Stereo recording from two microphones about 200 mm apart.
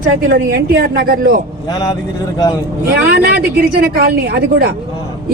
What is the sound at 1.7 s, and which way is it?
Speech, 15° left (ahead or behind).